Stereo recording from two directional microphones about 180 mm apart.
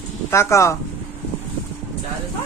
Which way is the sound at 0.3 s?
15° left (ahead or behind).